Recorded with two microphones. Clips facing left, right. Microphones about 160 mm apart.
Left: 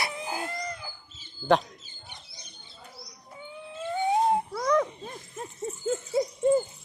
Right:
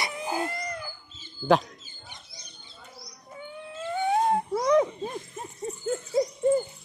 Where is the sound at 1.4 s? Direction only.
10° left (ahead or behind).